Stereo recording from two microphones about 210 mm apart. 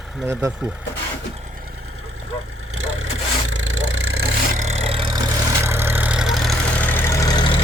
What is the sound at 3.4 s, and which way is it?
Vehicle, 90° right.